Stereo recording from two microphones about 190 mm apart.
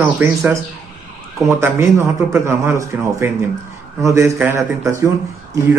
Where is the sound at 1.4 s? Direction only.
15° right (ahead or behind).